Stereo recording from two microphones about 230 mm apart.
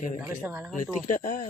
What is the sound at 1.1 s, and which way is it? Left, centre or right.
Speech, left.